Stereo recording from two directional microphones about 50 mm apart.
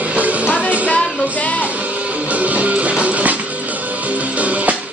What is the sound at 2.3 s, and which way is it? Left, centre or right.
Music, right.